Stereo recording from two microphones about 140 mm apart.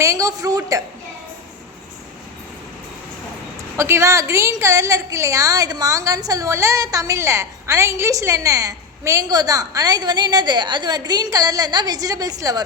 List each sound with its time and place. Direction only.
0.0 s a woman's voice: 25° right (ahead or behind)
3.8 s a woman's voice: 20° right (ahead or behind)